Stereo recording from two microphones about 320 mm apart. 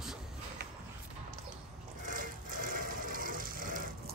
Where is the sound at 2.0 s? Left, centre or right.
Right.